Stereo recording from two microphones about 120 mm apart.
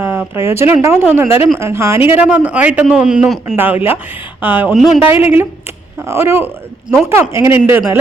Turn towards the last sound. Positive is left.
turn(degrees=-20)  # may be behind; listen again after turning